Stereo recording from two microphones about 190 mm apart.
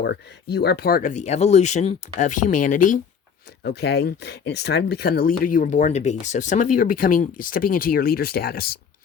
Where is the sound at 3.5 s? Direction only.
60° left (ahead or behind).